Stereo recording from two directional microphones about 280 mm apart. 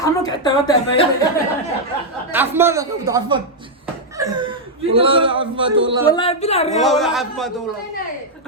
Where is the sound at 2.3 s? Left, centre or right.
Centre.